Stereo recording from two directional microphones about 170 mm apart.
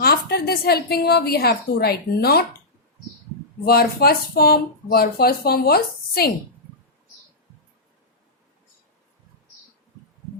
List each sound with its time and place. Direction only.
0.0 s a woman's voice: 65° left (ahead or behind)
3.7 s speech: 65° left (ahead or behind)